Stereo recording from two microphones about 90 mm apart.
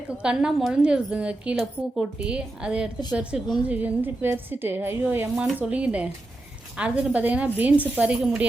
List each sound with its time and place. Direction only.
0.2 s a woman's voice: 10° right (ahead or behind)
3.7 s a woman's voice: 20° right (ahead or behind)